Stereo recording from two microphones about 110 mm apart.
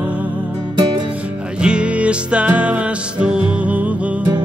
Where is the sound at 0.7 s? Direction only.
40° right (ahead or behind).